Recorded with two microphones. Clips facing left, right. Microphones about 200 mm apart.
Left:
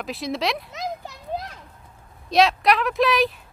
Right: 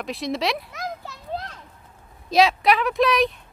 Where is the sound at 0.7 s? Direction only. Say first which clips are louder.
Left 2 dB; 20° left (ahead or behind).